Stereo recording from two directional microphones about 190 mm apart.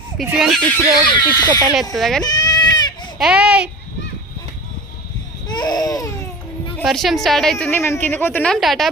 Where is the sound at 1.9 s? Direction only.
Centre (ahead or behind).